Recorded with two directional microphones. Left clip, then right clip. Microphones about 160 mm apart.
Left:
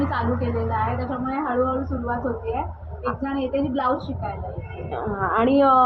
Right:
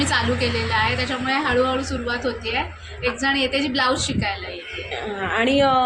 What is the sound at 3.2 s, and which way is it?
Speech, 5° right (ahead or behind).